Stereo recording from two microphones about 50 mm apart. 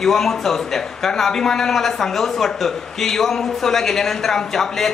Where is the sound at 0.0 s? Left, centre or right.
Centre.